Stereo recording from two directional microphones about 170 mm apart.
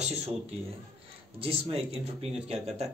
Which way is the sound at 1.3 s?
35° right (ahead or behind).